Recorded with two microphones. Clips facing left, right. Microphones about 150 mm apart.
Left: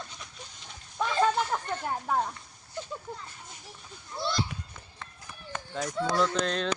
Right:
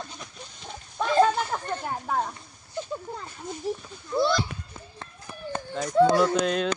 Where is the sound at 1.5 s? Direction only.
5° right (ahead or behind).